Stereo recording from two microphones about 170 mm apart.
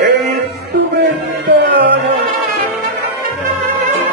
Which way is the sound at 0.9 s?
90° right.